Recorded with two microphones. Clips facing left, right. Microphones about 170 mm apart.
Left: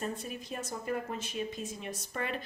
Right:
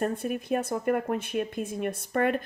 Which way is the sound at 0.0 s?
55° right (ahead or behind).